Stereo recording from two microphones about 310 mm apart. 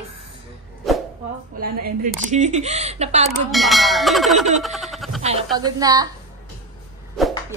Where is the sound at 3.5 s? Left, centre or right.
Centre.